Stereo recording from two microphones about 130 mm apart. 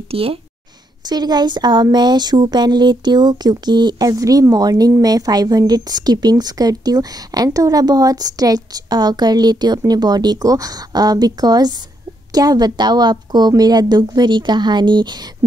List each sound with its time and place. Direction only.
0.1 s speech: 45° right (ahead or behind)
1.0 s a woman's voice: 30° right (ahead or behind)